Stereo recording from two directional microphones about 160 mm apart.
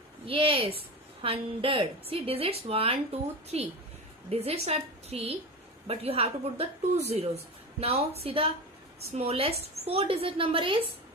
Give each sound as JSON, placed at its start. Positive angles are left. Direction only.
{"t": 0.3, "sound": "a woman's voice", "side_deg": -35}